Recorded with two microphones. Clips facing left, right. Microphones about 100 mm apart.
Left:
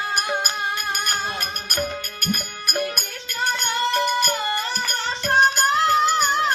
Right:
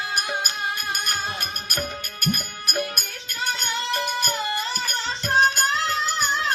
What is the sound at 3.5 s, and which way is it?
Music, 60° left (ahead or behind).